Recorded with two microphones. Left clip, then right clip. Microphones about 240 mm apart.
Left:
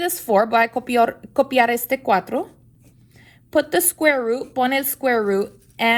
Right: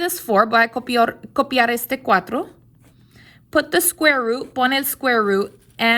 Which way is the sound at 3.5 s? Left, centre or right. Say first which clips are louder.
Right 1 dB; right.